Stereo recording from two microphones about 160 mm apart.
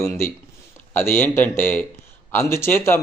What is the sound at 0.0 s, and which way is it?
A man's voice, 15° left (ahead or behind).